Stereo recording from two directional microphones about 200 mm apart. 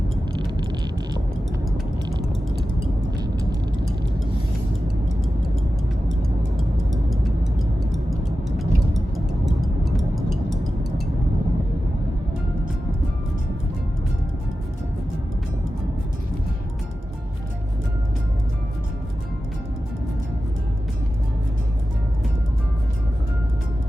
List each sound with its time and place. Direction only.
0.3 s vehicle: 20° right (ahead or behind)
3.2 s vehicle: 20° right (ahead or behind)
6.6 s music: centre (ahead or behind)
8.4 s music: centre (ahead or behind)